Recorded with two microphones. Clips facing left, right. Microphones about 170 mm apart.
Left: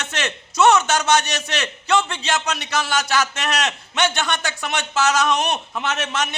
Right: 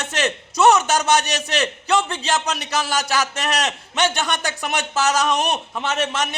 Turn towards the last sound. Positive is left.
turn(degrees=-35)  # may be behind; listen again after turning